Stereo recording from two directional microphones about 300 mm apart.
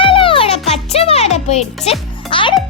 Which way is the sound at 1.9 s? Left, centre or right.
Centre.